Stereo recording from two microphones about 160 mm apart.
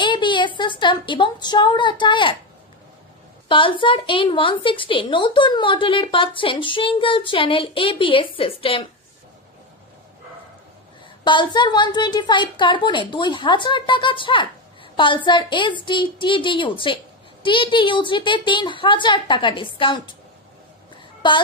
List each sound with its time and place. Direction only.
0.0 s a sound: 30° left (ahead or behind)
0.6 s a woman's voice: 30° left (ahead or behind)
3.4 s a woman's voice: 30° left (ahead or behind)
11.2 s a woman's voice: 30° left (ahead or behind)
21.2 s a woman's voice: 30° left (ahead or behind)